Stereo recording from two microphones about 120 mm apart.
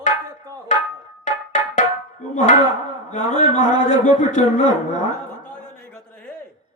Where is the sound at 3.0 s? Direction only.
90° left.